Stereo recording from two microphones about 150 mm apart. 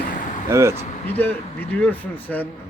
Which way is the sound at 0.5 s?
20° right (ahead or behind).